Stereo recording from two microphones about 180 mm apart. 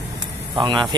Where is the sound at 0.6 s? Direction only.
25° right (ahead or behind).